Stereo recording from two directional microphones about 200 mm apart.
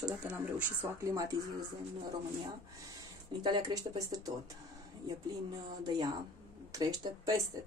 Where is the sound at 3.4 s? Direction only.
20° right (ahead or behind).